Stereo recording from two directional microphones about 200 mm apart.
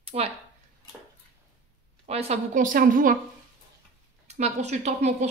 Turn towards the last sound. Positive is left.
turn(degrees=-35)  # may be behind; listen again after turning